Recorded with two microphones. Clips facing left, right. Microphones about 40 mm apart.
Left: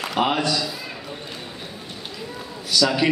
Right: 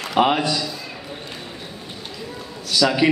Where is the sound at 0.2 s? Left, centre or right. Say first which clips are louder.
Right 3 dB; centre.